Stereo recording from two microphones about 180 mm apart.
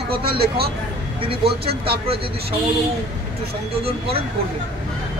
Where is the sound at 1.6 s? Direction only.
60° right (ahead or behind).